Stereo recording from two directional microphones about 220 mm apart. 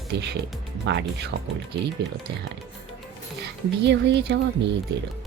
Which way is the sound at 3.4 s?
50° right (ahead or behind).